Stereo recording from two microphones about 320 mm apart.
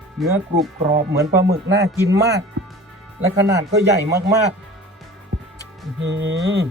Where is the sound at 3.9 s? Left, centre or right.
Right.